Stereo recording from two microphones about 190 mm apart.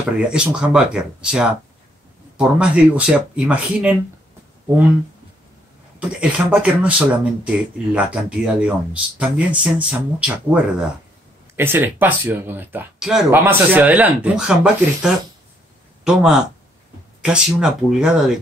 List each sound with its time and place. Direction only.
0.3 s speech: 5° right (ahead or behind)
5.9 s speech: 5° right (ahead or behind)